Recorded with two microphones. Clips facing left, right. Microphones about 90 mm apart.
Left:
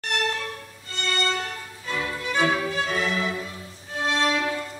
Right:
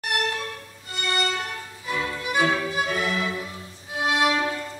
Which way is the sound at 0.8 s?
15° right (ahead or behind).